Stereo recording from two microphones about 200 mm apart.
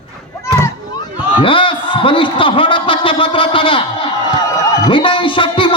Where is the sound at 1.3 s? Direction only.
25° left (ahead or behind).